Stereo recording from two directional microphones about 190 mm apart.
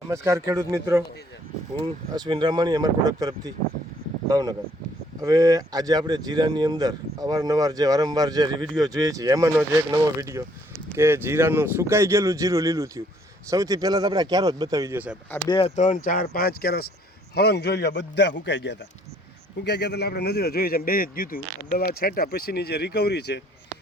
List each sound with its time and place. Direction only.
0.1 s speech: 15° right (ahead or behind)
15.4 s a man's voice: 30° left (ahead or behind); by 23.4 s 60° left (ahead or behind)